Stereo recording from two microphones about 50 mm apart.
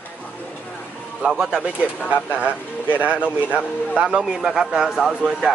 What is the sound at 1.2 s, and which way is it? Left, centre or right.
Speech, centre.